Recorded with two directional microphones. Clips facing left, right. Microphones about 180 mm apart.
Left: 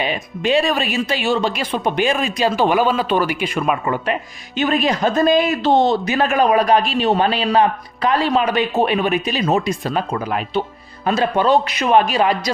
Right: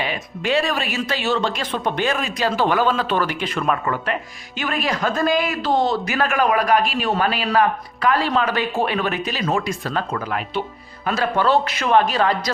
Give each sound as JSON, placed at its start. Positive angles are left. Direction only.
{"t": 0.0, "sound": "speech", "side_deg": 20}